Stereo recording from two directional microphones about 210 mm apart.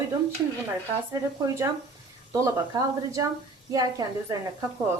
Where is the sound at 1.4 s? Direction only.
15° right (ahead or behind).